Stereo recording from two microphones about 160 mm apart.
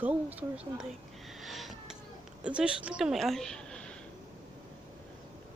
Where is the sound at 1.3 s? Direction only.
Centre (ahead or behind).